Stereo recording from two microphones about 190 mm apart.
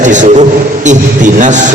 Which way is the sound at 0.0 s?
40° right (ahead or behind).